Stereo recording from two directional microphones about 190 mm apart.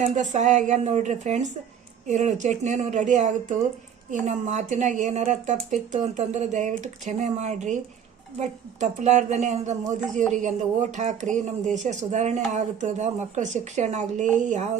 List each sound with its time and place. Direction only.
0.0 s speech: 40° right (ahead or behind)